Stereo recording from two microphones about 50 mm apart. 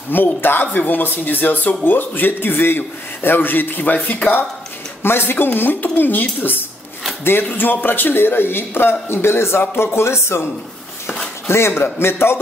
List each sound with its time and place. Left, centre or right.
0.1 s speech: left
5.0 s speech: left